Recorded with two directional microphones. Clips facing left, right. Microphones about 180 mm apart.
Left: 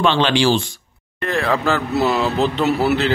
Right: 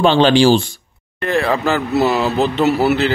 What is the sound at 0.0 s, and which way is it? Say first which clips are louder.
Speech: right 5 dB; 35° right (ahead or behind).